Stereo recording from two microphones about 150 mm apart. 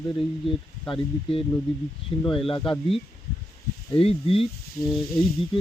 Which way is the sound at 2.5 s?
35° left (ahead or behind).